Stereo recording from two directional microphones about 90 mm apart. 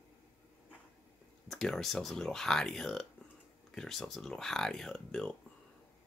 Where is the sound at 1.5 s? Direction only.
Centre (ahead or behind).